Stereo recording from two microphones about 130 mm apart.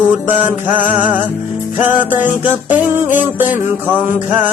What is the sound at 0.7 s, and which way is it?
Music, 85° left.